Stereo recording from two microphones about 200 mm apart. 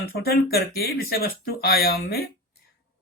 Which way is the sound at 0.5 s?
50° left (ahead or behind).